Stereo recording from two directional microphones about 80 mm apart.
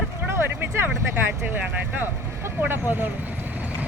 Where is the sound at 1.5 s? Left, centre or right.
Right.